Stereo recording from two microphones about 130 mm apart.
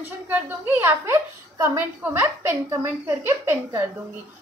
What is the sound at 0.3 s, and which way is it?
A woman's voice, 15° right (ahead or behind).